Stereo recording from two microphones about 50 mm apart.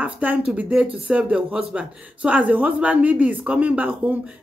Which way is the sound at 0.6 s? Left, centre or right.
Right.